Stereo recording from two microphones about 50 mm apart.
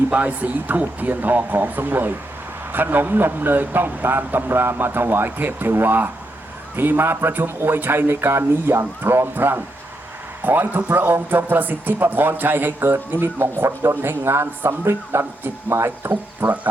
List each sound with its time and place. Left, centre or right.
0.1 s speech: right
16.4 s speech: right